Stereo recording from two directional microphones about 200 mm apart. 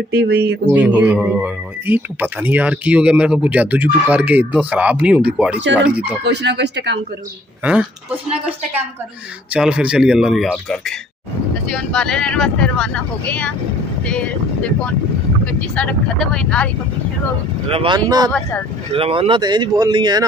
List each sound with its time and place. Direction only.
0.1 s speech: 55° right (ahead or behind)
0.7 s speech: 5° right (ahead or behind)
6.2 s speech: 60° right (ahead or behind)
7.6 s speech: 5° right (ahead or behind)
9.5 s speech: 5° right (ahead or behind)
15.7 s speech: 5° left (ahead or behind)
17.6 s speech: 25° right (ahead or behind)